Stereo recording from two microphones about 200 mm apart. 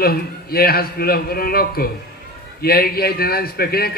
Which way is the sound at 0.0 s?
50° left (ahead or behind).